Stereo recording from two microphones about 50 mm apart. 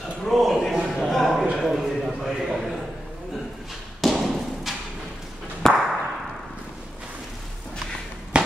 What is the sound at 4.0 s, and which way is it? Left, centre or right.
Thump, centre.